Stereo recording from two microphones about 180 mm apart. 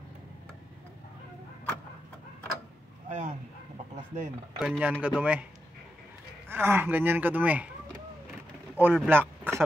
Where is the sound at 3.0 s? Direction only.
40° right (ahead or behind).